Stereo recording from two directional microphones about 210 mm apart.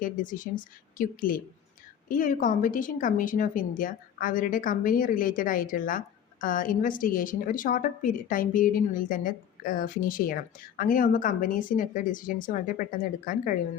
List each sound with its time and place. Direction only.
0.0 s a woman's voice: 40° left (ahead or behind)